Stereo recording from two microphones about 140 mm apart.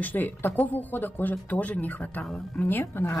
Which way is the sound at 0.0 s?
15° left (ahead or behind).